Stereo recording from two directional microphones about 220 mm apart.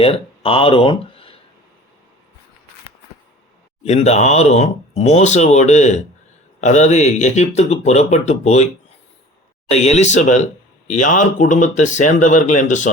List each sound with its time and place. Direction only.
0.0 s speech: 25° left (ahead or behind)
3.8 s a man's voice: 30° left (ahead or behind)
9.7 s a man's voice: 30° left (ahead or behind)